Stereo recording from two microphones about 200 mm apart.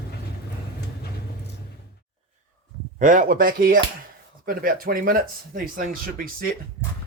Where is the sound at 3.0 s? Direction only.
40° right (ahead or behind).